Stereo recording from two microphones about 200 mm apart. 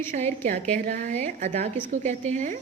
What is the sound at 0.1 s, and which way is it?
A woman's voice, 35° right (ahead or behind).